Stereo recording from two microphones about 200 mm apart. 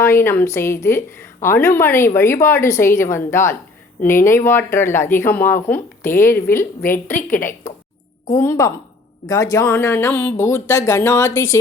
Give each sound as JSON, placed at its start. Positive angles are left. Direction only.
{"t": 0.0, "sound": "a woman's voice", "side_deg": 10}
{"t": 8.3, "sound": "a woman's voice", "side_deg": 15}